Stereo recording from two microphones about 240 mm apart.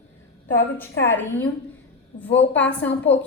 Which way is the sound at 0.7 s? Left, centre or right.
Centre.